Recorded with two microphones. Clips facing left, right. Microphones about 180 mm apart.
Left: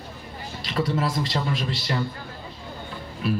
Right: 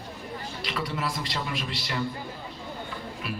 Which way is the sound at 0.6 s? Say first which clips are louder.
Left 7 dB; 35° left (ahead or behind).